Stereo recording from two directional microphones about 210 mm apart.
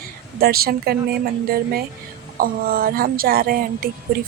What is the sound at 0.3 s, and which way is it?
Speech, 45° right (ahead or behind).